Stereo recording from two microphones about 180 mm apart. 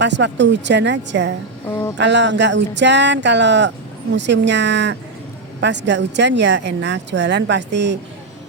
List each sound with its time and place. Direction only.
0.0 s speech: 80° right